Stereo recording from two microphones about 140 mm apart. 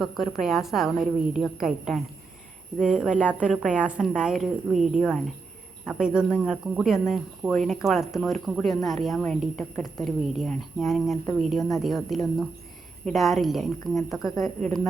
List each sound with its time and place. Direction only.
0.0 s speech: centre (ahead or behind)